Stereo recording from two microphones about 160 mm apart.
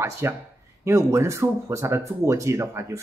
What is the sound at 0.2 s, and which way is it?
Speech, 15° right (ahead or behind).